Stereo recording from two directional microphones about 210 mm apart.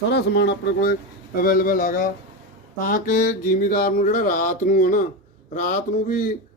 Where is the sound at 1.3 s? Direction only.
40° left (ahead or behind).